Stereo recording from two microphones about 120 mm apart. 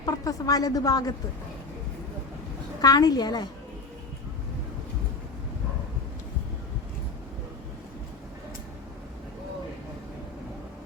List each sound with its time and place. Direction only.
0.0 s a man's voice: 30° left (ahead or behind)
2.8 s a woman's voice: 35° left (ahead or behind)